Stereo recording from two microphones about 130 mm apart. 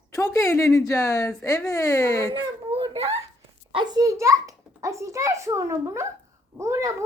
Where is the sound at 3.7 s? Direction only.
35° right (ahead or behind).